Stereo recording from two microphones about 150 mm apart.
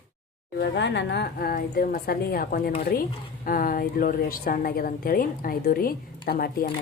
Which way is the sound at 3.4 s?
70° left (ahead or behind).